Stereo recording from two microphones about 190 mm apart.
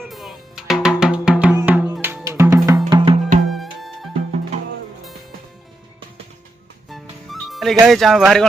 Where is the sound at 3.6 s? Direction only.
Centre (ahead or behind).